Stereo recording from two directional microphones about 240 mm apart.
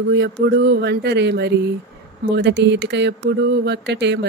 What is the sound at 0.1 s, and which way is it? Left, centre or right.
Speech, right.